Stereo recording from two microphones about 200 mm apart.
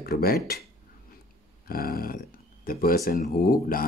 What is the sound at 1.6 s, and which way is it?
Speech, 45° left (ahead or behind).